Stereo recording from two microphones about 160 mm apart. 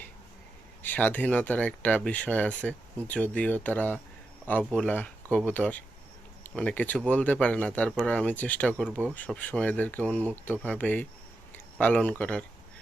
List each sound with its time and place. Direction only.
0.8 s speech: 10° left (ahead or behind)